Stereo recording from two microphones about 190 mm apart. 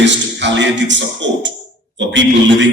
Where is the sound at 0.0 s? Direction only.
70° right (ahead or behind).